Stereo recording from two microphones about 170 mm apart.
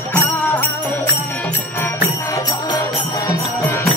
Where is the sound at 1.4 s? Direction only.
10° left (ahead or behind).